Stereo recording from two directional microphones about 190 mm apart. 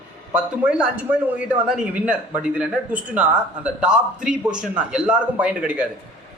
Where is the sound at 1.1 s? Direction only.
10° right (ahead or behind).